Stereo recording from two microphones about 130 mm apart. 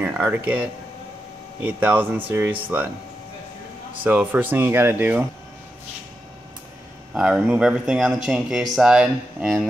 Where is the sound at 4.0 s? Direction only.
10° right (ahead or behind).